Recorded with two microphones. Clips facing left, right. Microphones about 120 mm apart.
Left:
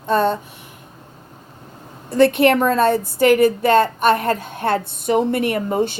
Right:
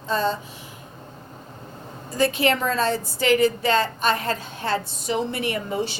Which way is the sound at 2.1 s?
65° left (ahead or behind).